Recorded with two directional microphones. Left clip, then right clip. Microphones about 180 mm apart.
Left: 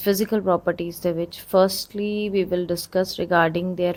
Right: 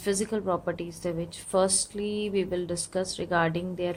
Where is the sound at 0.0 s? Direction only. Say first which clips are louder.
Left 7 dB; 40° left (ahead or behind).